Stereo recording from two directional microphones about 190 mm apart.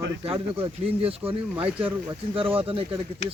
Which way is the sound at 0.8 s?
30° right (ahead or behind).